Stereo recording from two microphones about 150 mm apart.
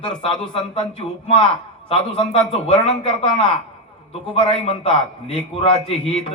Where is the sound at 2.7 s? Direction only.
40° left (ahead or behind).